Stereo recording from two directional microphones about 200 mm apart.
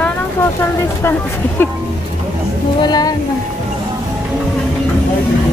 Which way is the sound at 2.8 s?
20° left (ahead or behind).